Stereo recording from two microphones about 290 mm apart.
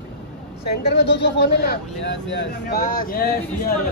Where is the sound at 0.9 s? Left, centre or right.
Left.